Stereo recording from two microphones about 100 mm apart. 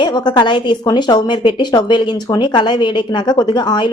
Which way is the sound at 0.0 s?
45° left (ahead or behind).